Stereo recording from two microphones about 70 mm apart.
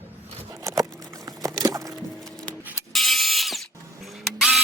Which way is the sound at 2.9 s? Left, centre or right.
Centre.